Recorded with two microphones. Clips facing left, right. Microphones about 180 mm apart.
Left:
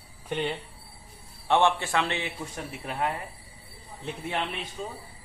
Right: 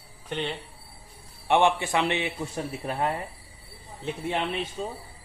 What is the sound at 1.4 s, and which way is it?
Speech, 15° right (ahead or behind).